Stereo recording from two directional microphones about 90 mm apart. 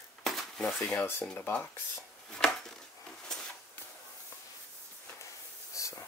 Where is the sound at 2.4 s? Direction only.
10° left (ahead or behind).